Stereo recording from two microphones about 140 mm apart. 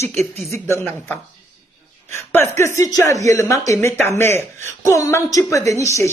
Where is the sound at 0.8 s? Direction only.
5° left (ahead or behind).